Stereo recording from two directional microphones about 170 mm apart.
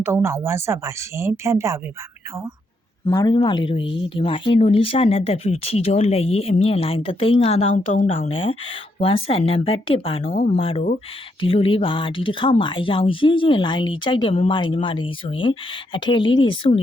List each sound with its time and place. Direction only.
0.0 s speech: 15° right (ahead or behind)
3.1 s speech: 25° left (ahead or behind)